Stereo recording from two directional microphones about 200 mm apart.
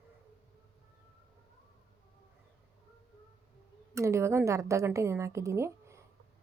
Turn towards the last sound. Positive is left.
turn(degrees=-15)  # may be behind; listen again after turning